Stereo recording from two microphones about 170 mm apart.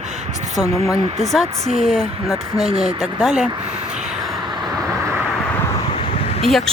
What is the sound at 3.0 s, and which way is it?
Speech, centre (ahead or behind).